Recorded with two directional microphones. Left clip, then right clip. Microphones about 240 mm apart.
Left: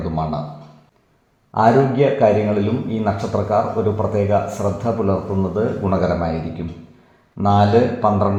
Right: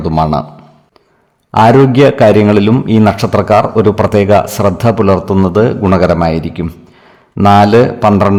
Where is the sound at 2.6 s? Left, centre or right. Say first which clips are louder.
Right 12 dB; right.